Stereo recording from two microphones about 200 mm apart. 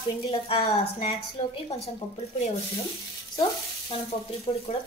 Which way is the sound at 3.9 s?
30° left (ahead or behind).